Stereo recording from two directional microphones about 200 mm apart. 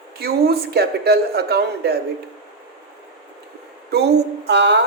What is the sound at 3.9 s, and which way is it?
Speech, 55° right (ahead or behind).